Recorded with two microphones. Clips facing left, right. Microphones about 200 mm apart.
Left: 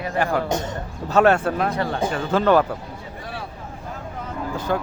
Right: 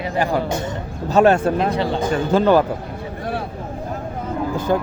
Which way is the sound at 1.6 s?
30° right (ahead or behind).